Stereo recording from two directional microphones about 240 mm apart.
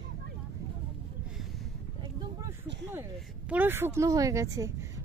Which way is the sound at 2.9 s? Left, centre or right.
Centre.